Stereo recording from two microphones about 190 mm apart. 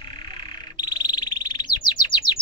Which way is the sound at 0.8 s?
20° left (ahead or behind).